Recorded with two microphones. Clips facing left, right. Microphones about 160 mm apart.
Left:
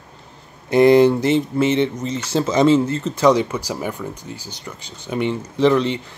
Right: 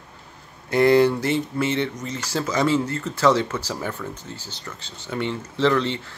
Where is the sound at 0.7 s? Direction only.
20° left (ahead or behind).